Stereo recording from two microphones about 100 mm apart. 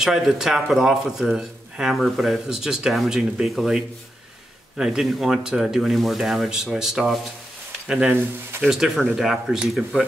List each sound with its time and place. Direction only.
0.0 s a man's voice: 5° right (ahead or behind)
8.1 s speech: 20° right (ahead or behind)
8.6 s a man's voice: 5° right (ahead or behind)